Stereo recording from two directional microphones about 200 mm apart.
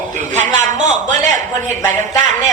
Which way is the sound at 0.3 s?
35° right (ahead or behind).